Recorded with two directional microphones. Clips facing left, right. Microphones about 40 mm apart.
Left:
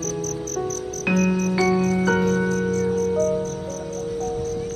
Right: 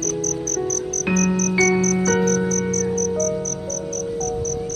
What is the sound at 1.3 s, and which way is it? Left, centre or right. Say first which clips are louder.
Music: right 2 dB; left.